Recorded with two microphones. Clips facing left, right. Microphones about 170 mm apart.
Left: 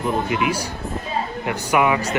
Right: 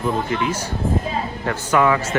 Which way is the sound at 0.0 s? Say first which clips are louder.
Even; 15° left (ahead or behind).